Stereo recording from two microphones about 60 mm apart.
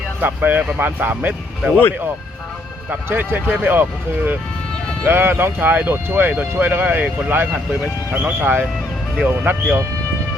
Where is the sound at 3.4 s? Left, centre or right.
Right.